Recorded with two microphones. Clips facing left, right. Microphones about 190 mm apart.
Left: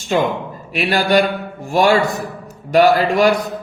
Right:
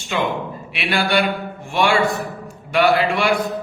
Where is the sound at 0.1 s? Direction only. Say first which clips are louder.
Left 4 dB; 40° left (ahead or behind).